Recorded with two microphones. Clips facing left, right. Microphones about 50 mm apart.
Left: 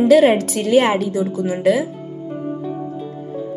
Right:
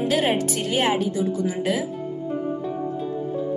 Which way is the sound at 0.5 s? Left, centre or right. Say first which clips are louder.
Left 7 dB; left.